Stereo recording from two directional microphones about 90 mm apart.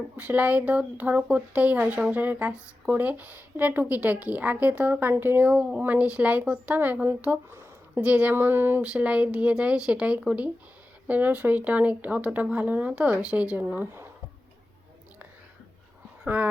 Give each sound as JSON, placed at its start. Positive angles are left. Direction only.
{"t": 0.2, "sound": "speech", "side_deg": -15}
{"t": 8.0, "sound": "speech", "side_deg": -15}
{"t": 8.8, "sound": "speech", "side_deg": -10}
{"t": 16.2, "sound": "speech", "side_deg": -20}